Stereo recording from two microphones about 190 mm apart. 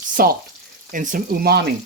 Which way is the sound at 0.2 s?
50° right (ahead or behind).